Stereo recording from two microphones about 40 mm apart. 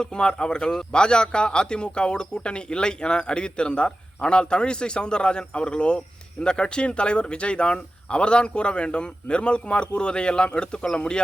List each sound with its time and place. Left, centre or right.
0.0 s a man's voice: left